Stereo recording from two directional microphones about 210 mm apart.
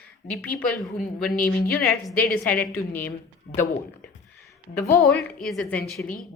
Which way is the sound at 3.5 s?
35° left (ahead or behind).